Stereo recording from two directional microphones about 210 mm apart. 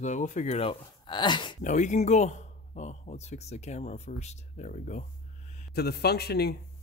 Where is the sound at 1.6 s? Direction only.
35° left (ahead or behind).